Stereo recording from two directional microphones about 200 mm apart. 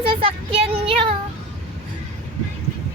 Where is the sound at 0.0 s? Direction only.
25° right (ahead or behind).